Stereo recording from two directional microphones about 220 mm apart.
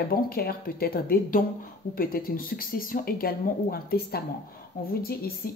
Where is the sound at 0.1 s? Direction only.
45° left (ahead or behind).